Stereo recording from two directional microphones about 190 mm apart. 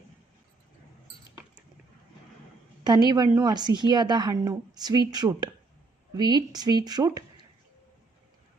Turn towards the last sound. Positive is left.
turn(degrees=-20)  # may be behind; listen again after turning